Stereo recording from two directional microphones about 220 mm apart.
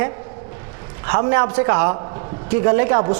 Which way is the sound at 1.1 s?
20° right (ahead or behind).